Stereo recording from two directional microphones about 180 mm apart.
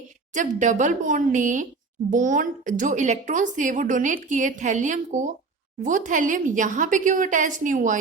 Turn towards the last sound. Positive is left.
turn(degrees=-45)  # may be behind; listen again after turning